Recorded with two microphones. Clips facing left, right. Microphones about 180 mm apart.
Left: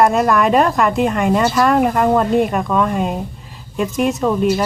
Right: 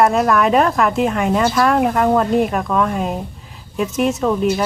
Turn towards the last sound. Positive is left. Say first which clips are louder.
# left 1 dB
turn(degrees=0)  # may be behind; listen again after turning